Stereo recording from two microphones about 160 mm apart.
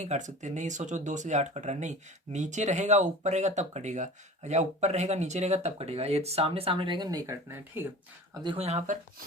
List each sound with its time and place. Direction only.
0.0 s speech: 50° right (ahead or behind); by 7.9 s 15° right (ahead or behind)
8.3 s speech: 30° right (ahead or behind)
8.6 s speech: 45° right (ahead or behind)